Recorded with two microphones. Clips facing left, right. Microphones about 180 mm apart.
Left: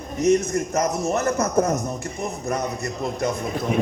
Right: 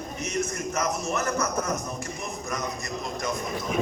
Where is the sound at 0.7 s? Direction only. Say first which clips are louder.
Left 5 dB; 35° left (ahead or behind).